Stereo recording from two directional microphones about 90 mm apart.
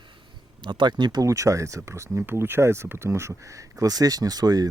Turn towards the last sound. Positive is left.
turn(degrees=-45)  # may be behind; listen again after turning